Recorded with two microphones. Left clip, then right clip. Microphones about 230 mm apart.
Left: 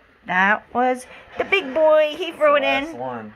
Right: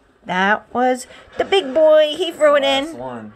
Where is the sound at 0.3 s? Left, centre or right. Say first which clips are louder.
Right 1 dB; centre.